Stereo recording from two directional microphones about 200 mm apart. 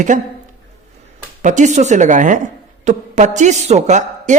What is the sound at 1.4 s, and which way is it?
A woman's voice, 40° right (ahead or behind).